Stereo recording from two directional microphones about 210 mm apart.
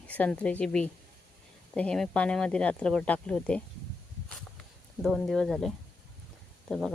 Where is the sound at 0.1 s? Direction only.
5° left (ahead or behind).